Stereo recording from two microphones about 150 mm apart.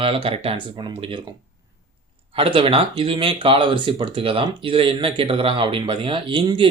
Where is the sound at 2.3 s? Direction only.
40° right (ahead or behind).